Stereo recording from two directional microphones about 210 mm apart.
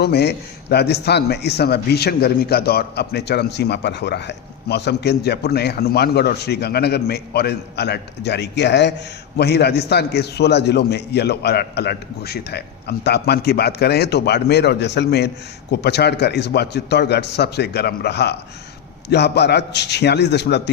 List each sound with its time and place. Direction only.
0.0 s a man's voice: 50° left (ahead or behind)